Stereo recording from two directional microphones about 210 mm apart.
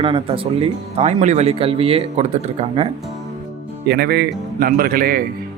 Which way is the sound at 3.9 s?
50° right (ahead or behind).